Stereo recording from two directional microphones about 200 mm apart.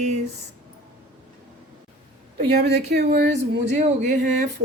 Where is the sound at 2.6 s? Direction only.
55° right (ahead or behind).